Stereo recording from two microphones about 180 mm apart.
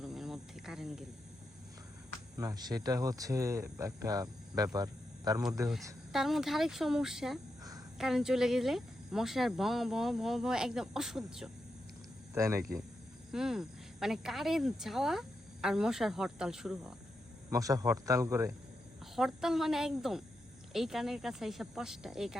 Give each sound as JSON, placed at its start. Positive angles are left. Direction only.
{"t": 0.0, "sound": "cricket", "side_deg": 0}
{"t": 2.4, "sound": "speech", "side_deg": -20}
{"t": 6.1, "sound": "speech", "side_deg": 0}
{"t": 12.3, "sound": "speech", "side_deg": -15}
{"t": 13.3, "sound": "speech", "side_deg": -5}
{"t": 17.5, "sound": "speech", "side_deg": -20}
{"t": 19.1, "sound": "speech", "side_deg": 0}